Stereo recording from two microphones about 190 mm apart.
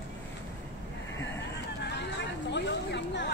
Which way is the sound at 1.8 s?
65° left (ahead or behind).